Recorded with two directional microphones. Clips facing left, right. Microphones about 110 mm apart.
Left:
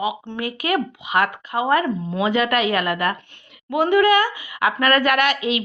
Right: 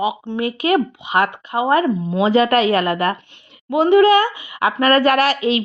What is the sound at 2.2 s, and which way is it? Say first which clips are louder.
Speech: right 5 dB; 30° right (ahead or behind).